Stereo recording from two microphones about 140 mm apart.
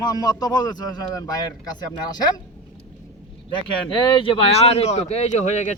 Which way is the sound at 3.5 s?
35° left (ahead or behind).